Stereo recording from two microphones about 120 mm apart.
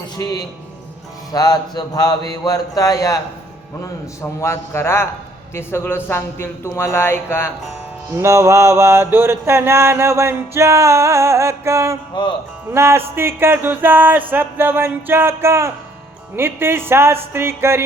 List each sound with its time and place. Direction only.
0.2 s mantra: 30° left (ahead or behind)
4.2 s speech: 25° left (ahead or behind)
8.1 s mantra: 25° right (ahead or behind)